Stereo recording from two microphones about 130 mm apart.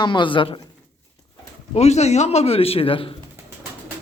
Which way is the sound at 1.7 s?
60° left (ahead or behind).